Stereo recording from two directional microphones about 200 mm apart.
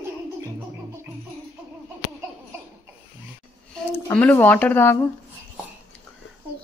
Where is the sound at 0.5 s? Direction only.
10° right (ahead or behind).